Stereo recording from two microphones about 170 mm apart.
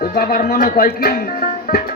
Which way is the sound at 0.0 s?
60° left (ahead or behind).